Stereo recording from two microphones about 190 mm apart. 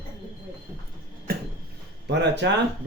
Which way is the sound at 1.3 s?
50° right (ahead or behind).